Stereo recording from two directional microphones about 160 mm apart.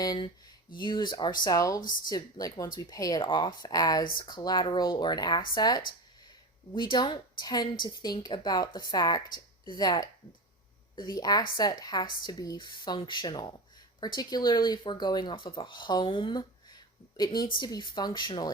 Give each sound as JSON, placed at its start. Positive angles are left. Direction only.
{"t": 0.0, "sound": "a woman's voice", "side_deg": 25}
{"t": 1.8, "sound": "speech", "side_deg": 60}
{"t": 2.0, "sound": "a woman's voice", "side_deg": 25}
{"t": 6.9, "sound": "a woman's voice", "side_deg": 30}